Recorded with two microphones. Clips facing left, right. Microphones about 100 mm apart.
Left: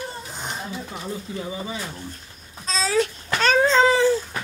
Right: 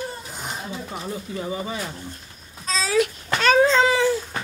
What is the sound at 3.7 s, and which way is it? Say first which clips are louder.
Babbling: left 1 dB; 35° left (ahead or behind).